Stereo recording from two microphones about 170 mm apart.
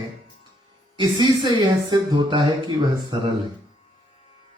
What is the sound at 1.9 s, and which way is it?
Speech, 25° right (ahead or behind).